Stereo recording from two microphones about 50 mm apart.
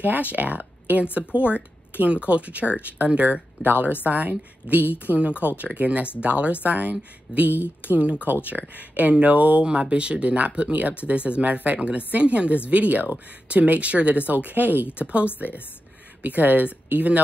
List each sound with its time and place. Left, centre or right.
0.0 s a woman's voice: right